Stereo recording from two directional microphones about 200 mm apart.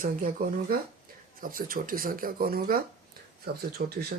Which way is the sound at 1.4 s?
45° right (ahead or behind).